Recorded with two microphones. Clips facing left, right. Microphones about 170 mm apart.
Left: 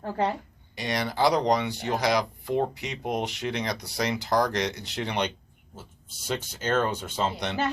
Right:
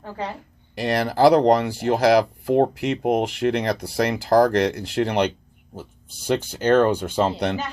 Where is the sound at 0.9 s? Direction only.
60° right (ahead or behind).